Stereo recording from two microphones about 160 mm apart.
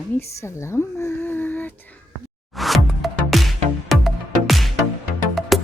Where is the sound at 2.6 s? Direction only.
Centre (ahead or behind).